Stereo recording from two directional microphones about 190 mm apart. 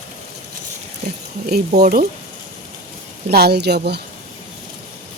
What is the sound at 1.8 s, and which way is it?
Speech, 50° right (ahead or behind).